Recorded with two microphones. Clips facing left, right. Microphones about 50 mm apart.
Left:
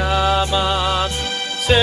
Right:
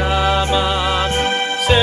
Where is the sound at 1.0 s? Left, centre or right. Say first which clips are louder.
Right 5 dB; right.